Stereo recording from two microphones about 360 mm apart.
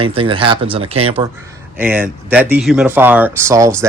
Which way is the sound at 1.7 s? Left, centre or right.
Centre.